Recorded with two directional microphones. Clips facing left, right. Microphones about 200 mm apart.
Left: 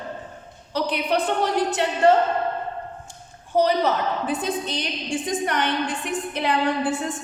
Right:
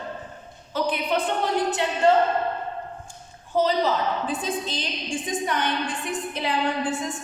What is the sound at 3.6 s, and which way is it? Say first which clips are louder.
A woman's voice: left 1 dB; 70° left (ahead or behind).